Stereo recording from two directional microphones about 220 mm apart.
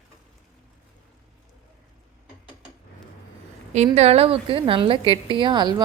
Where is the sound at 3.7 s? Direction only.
30° right (ahead or behind).